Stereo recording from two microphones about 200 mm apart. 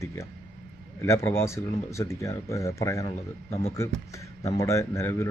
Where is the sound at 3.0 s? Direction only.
30° left (ahead or behind).